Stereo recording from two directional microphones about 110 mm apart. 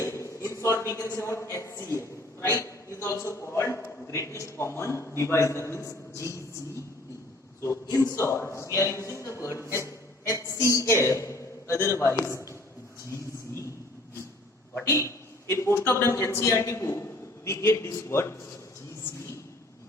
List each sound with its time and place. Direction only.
0.0 s a woman's voice: 25° left (ahead or behind)
7.6 s a man's voice: 25° left (ahead or behind)
15.4 s a man's voice: 25° left (ahead or behind)